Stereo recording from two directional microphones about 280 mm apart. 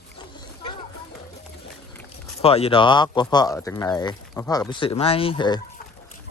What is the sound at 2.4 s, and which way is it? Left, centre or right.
Speech, centre.